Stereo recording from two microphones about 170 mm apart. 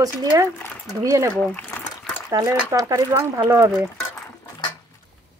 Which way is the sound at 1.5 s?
10° left (ahead or behind).